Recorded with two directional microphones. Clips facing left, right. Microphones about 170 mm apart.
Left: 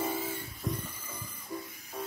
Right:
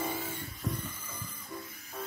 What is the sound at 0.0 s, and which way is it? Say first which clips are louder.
Music: left 2 dB; 5° left (ahead or behind).